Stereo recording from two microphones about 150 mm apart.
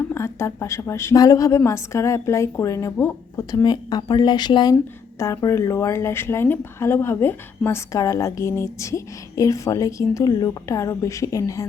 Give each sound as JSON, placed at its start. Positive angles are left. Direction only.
{"t": 0.1, "sound": "speech", "side_deg": 20}